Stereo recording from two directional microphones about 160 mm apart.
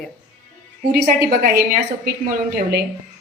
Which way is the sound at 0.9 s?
75° right (ahead or behind).